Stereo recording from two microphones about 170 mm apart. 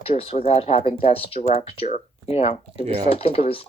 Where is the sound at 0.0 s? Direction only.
35° left (ahead or behind).